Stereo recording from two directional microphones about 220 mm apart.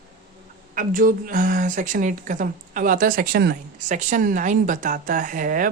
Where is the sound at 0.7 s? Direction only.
40° right (ahead or behind).